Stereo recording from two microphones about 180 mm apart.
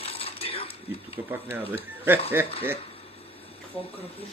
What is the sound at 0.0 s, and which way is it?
Coin, 30° left (ahead or behind).